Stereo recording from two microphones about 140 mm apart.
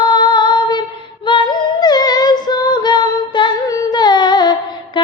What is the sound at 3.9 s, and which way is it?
Humming, 30° left (ahead or behind).